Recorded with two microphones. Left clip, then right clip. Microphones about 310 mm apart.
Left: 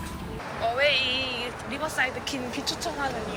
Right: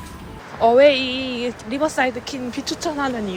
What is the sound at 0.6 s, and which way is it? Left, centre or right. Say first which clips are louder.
Speech: right 10 dB; centre.